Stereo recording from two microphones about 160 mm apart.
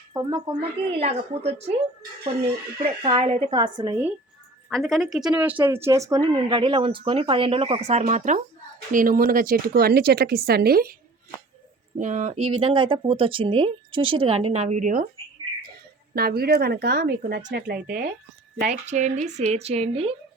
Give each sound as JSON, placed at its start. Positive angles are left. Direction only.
{"t": 0.1, "sound": "a woman's voice", "side_deg": -25}
{"t": 0.9, "sound": "speech", "side_deg": -40}
{"t": 2.8, "sound": "speech", "side_deg": -35}
{"t": 4.7, "sound": "speech", "side_deg": 5}
{"t": 6.2, "sound": "speech", "side_deg": -30}
{"t": 8.9, "sound": "speech", "side_deg": -60}
{"t": 11.9, "sound": "speech", "side_deg": -50}
{"t": 12.6, "sound": "speech", "side_deg": -30}
{"t": 16.1, "sound": "speech", "side_deg": -70}
{"t": 17.6, "sound": "speech", "side_deg": -70}
{"t": 18.7, "sound": "speech", "side_deg": -50}